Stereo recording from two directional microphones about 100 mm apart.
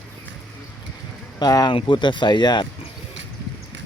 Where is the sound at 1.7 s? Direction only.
55° left (ahead or behind).